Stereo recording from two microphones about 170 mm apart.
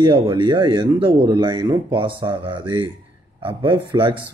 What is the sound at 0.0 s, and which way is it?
Speech, 25° right (ahead or behind).